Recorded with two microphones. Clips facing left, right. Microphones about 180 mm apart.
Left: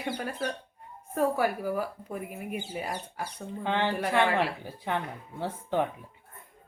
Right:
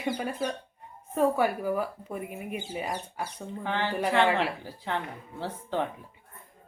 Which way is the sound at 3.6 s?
20° left (ahead or behind).